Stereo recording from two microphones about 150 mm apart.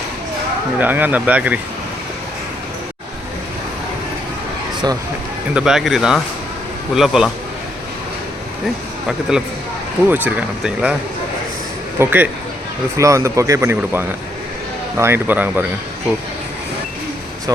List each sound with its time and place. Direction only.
0.8 s speech: 10° right (ahead or behind)
5.5 s speech: 5° right (ahead or behind)
10.1 s speech: 10° right (ahead or behind)
11.9 s speech: 10° right (ahead or behind)